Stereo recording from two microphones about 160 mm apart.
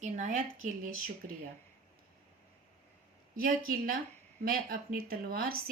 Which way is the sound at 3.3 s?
60° right (ahead or behind).